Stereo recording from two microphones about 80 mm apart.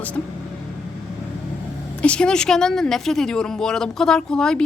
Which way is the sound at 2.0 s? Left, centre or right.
Centre.